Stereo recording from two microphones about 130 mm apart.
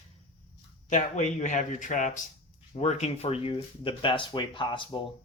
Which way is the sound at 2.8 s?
60° left (ahead or behind).